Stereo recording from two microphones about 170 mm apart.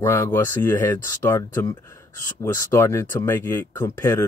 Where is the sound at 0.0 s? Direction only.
15° left (ahead or behind).